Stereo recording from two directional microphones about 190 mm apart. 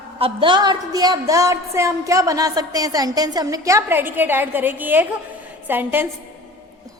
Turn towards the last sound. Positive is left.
turn(degrees=-10)  # may be behind; listen again after turning